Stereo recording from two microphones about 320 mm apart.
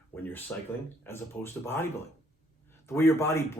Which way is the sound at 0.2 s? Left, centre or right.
Centre.